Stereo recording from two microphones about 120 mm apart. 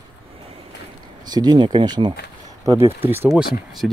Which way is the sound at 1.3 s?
35° right (ahead or behind).